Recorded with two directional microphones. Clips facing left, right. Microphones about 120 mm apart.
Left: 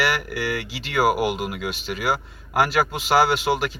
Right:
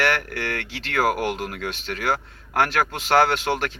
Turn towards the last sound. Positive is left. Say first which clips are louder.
# left 1 dB
turn(degrees=5)  # may be behind; listen again after turning